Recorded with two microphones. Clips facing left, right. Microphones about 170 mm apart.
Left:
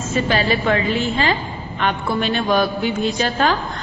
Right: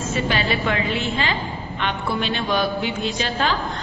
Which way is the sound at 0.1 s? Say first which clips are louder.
Left 5 dB; 40° left (ahead or behind).